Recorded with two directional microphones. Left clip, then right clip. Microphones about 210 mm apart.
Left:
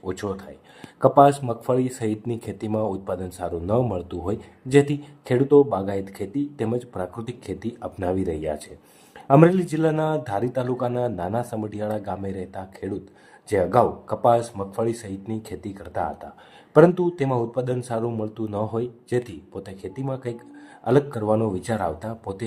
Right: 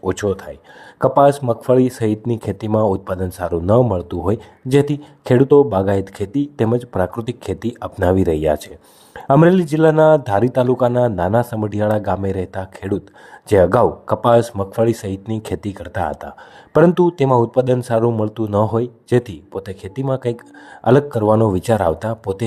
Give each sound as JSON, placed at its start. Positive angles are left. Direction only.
{"t": 0.0, "sound": "speech", "side_deg": -45}